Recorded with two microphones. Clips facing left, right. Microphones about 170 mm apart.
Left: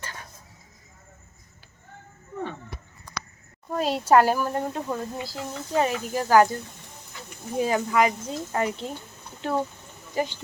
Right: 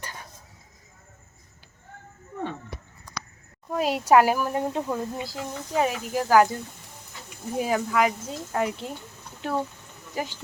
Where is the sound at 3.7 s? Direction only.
10° right (ahead or behind).